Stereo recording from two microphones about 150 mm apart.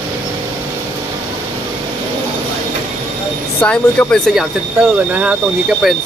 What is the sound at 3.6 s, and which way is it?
Speech, 10° left (ahead or behind).